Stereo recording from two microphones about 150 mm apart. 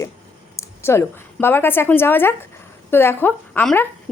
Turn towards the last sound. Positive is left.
turn(degrees=10)  # may be behind; listen again after turning